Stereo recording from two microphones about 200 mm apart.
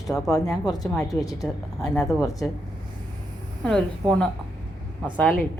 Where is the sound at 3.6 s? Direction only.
5° left (ahead or behind).